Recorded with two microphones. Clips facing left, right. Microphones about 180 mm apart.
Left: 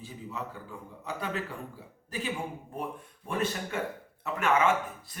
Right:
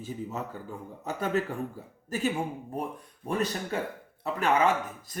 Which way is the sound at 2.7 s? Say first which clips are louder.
Right 3 dB; 40° right (ahead or behind).